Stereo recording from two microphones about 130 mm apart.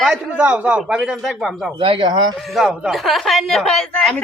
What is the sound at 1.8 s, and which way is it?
Speech, 40° right (ahead or behind).